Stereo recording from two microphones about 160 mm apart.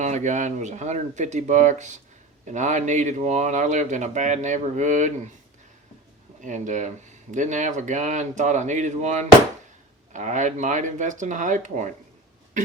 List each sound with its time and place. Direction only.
0.0 s speech: 50° right (ahead or behind)
6.4 s speech: 50° right (ahead or behind)